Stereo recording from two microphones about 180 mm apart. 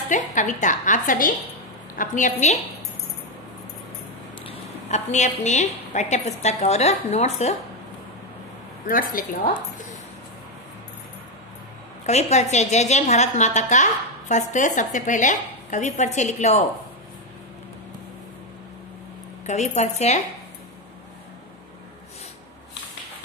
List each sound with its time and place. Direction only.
0.1 s speech: 45° left (ahead or behind)
4.5 s a woman's voice: 40° left (ahead or behind)
8.8 s speech: 50° left (ahead or behind)
12.1 s a woman's voice: 40° left (ahead or behind)
19.4 s a woman's voice: 40° left (ahead or behind)